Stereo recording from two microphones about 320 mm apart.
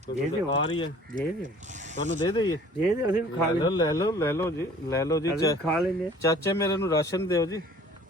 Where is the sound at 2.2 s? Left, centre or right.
Centre.